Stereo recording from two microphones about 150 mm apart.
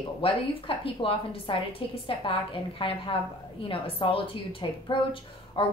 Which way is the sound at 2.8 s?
35° left (ahead or behind).